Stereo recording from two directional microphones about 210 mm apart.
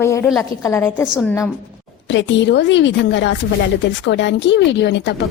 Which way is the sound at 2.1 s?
60° left (ahead or behind).